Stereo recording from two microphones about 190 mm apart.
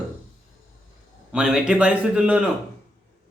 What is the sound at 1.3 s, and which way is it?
Speech, 5° right (ahead or behind).